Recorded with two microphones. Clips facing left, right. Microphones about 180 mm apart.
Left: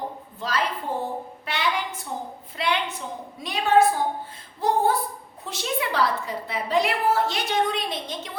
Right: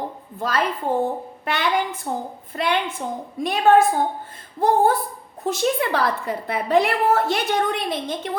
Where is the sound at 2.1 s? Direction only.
50° right (ahead or behind).